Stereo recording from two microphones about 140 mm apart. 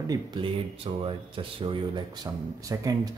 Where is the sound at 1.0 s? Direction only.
35° right (ahead or behind).